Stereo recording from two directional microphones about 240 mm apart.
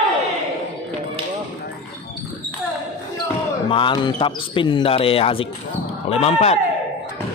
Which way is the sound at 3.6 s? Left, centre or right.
Left.